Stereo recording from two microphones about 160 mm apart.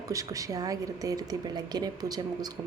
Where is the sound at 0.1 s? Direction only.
20° right (ahead or behind).